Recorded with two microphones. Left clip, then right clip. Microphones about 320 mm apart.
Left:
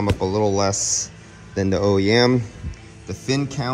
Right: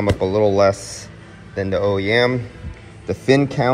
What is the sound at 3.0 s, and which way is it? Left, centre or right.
Speech, centre.